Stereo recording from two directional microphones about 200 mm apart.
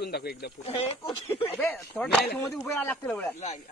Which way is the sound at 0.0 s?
50° left (ahead or behind).